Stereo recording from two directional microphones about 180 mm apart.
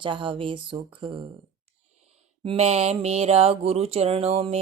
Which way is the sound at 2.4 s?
35° right (ahead or behind).